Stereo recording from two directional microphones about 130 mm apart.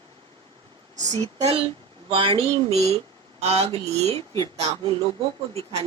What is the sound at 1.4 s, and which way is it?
Speech, 50° right (ahead or behind).